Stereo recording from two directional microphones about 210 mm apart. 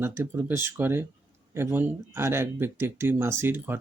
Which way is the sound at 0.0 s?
10° right (ahead or behind).